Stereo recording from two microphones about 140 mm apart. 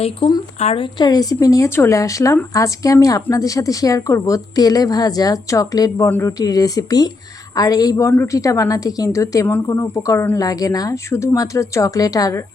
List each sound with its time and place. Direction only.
0.2 s a woman's voice: 35° left (ahead or behind)
0.9 s a woman's voice: 30° left (ahead or behind)
6.4 s a woman's voice: 25° left (ahead or behind)